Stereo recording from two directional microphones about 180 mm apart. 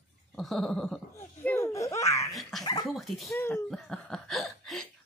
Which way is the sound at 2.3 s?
Centre (ahead or behind).